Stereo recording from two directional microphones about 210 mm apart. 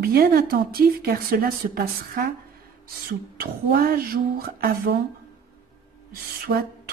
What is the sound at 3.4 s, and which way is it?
Speech, 45° right (ahead or behind).